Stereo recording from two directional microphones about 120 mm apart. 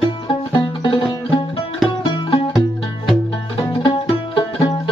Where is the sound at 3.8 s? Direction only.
35° left (ahead or behind).